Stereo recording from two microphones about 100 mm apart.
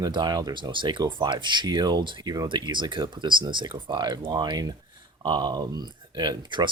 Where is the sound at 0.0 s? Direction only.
45° right (ahead or behind).